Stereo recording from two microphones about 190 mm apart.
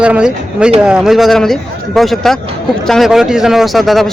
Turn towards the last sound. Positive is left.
turn(degrees=0)  # may be behind; listen again after turning